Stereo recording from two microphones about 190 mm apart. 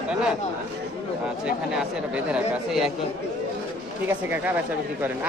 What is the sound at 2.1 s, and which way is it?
Speech, 5° right (ahead or behind).